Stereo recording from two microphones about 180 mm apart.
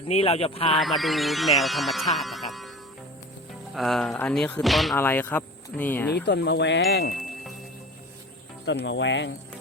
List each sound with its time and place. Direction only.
0.0 s speech: 35° left (ahead or behind)
0.8 s speech: centre (ahead or behind)
2.1 s music: centre (ahead or behind)
3.8 s speech: centre (ahead or behind)
4.9 s speech: 10° left (ahead or behind)
6.1 s wind chime: 70° left (ahead or behind); by 7.1 s 85° left
8.6 s speech: 80° left